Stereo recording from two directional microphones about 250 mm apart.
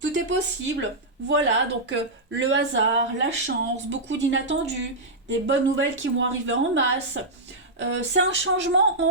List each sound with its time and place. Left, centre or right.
0.0 s speech: right